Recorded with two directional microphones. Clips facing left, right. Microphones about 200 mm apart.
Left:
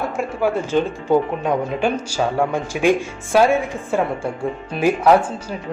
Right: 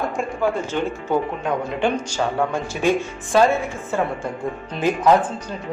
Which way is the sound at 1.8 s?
10° left (ahead or behind).